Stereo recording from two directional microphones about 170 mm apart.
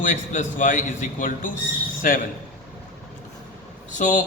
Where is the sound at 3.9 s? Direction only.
45° left (ahead or behind).